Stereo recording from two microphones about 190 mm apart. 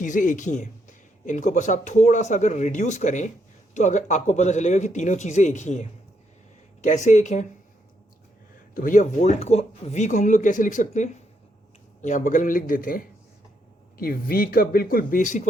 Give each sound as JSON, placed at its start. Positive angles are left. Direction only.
{"t": 0.0, "sound": "speech", "side_deg": 45}
{"t": 8.7, "sound": "speech", "side_deg": 45}